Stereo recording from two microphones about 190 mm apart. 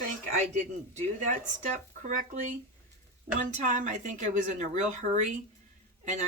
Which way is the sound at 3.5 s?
40° right (ahead or behind).